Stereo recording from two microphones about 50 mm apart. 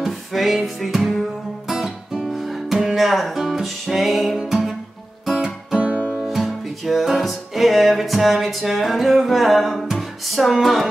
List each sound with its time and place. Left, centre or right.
0.0 s music: centre
5.8 s music: right
6.2 s music: centre